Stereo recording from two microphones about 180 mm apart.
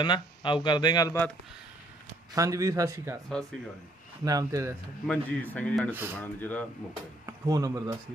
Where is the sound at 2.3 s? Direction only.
20° right (ahead or behind).